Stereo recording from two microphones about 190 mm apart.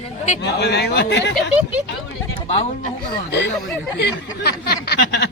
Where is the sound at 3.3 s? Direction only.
65° left (ahead or behind).